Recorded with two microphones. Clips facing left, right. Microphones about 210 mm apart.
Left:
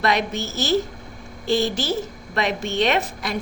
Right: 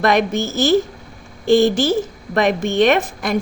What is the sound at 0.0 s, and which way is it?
A woman's voice, 50° right (ahead or behind).